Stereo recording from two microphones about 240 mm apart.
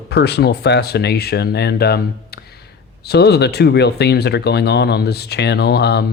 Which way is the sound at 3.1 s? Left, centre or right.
Left.